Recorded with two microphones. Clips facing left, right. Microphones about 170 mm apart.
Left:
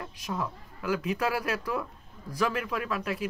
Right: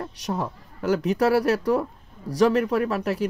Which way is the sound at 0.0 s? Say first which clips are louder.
Right 5 dB; 35° right (ahead or behind).